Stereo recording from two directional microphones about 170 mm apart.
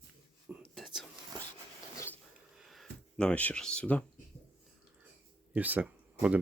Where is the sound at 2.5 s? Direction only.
Centre (ahead or behind).